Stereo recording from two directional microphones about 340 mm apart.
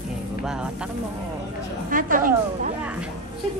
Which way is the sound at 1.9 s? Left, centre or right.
Right.